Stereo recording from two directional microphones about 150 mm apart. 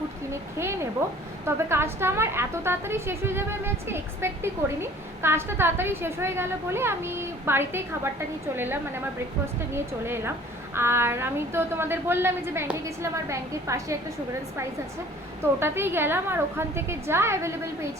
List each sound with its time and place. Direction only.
1.5 s a woman's voice: 15° right (ahead or behind)
15.6 s a woman's voice: 15° right (ahead or behind)